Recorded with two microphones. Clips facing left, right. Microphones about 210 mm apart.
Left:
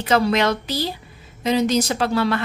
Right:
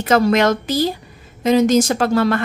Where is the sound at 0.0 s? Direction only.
50° right (ahead or behind).